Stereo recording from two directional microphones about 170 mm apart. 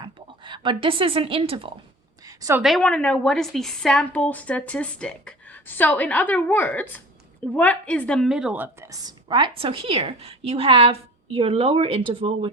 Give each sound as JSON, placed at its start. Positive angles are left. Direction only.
{"t": 0.4, "sound": "a woman's voice", "side_deg": -30}
{"t": 2.2, "sound": "a sound", "side_deg": -20}
{"t": 2.6, "sound": "a woman's voice", "side_deg": 0}